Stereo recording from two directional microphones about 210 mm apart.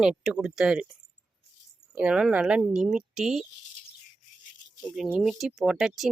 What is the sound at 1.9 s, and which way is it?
Speech, 5° right (ahead or behind).